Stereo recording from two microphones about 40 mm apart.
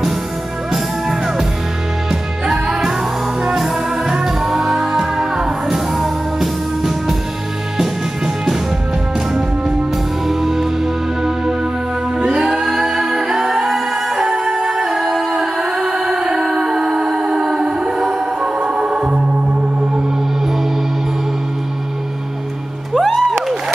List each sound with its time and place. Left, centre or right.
2.0 s music: centre
10.2 s music: centre
12.3 s music: centre
13.0 s a capella: centre
16.5 s music: centre
22.9 s music: centre